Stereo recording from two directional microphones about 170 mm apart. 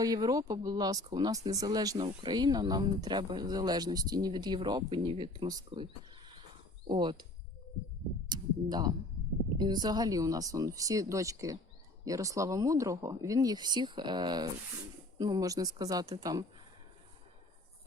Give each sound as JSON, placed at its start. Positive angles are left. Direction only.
{"t": 0.0, "sound": "speech", "side_deg": -20}
{"t": 8.3, "sound": "speech", "side_deg": -25}